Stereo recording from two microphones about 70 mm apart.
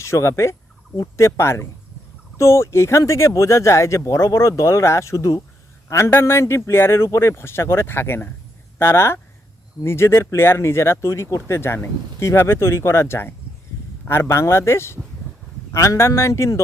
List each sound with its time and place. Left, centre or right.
0.0 s speech: left
6.1 s speech: left